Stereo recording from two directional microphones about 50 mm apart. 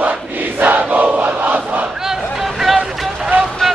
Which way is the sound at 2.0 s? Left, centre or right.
Centre.